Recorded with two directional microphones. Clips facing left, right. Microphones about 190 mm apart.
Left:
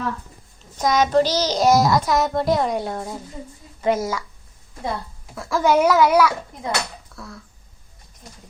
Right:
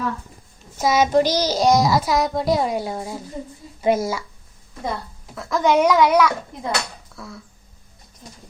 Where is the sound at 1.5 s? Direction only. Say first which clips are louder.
Left 1 dB; centre (ahead or behind).